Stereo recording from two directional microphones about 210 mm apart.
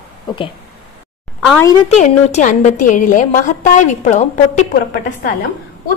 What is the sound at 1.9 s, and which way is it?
A woman's voice, 35° left (ahead or behind).